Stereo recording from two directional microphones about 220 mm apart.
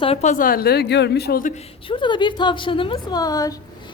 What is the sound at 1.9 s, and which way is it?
A woman's voice, 20° left (ahead or behind).